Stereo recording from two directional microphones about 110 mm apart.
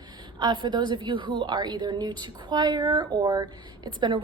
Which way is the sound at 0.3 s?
45° right (ahead or behind).